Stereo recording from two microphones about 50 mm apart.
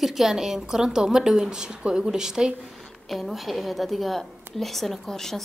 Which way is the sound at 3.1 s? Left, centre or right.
Centre.